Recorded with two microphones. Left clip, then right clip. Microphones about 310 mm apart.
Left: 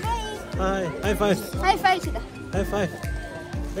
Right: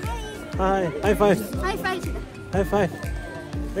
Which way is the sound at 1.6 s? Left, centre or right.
Left.